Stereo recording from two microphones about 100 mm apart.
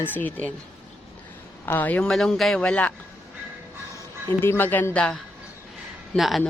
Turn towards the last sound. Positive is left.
turn(degrees=0)  # may be behind; listen again after turning